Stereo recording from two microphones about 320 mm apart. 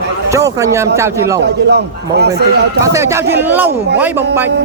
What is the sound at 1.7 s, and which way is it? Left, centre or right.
Speech, right.